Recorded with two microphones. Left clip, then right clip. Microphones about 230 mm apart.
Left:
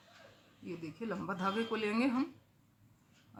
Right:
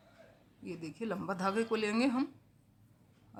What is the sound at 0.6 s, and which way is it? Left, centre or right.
Speech, right.